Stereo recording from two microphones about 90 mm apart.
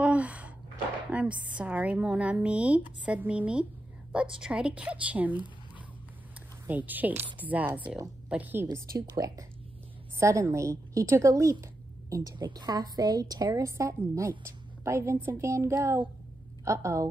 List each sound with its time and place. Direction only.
0.0 s a sound: 15° right (ahead or behind)
1.1 s speech: 15° right (ahead or behind)
6.7 s a woman's voice: 20° right (ahead or behind)
8.7 s a woman's voice: 35° right (ahead or behind)
16.6 s a woman's voice: 35° right (ahead or behind)